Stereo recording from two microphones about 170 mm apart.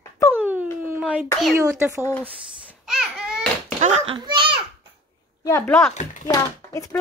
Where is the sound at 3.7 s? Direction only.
40° right (ahead or behind).